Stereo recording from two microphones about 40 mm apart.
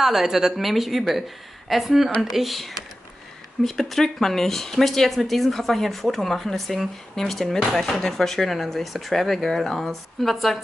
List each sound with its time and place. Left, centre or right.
0.0 s speech: centre